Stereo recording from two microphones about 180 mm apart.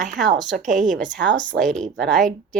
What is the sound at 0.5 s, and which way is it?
Speech, 45° right (ahead or behind).